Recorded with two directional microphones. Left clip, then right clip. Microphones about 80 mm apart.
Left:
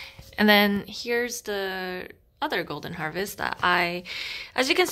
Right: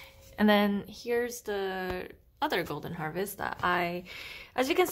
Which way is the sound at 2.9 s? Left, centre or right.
Left.